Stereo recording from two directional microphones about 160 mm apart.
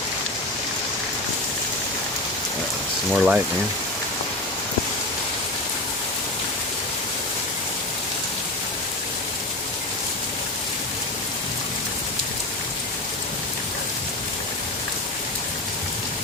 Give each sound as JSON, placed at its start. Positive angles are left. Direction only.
{"t": 3.1, "sound": "speech", "side_deg": -5}